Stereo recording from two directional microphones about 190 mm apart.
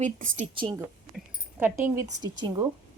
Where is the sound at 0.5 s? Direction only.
25° right (ahead or behind).